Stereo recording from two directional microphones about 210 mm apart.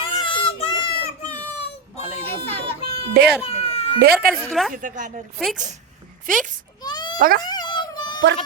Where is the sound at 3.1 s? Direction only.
50° right (ahead or behind).